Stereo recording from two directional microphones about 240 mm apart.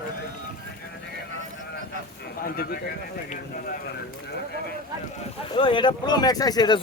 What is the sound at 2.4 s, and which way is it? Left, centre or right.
Speech, left.